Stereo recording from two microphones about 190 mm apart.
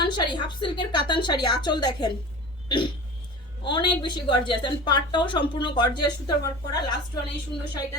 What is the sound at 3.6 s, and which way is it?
A woman's voice, 25° left (ahead or behind).